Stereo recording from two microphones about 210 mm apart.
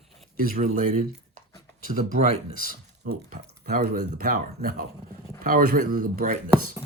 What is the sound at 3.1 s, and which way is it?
Speech, 45° right (ahead or behind).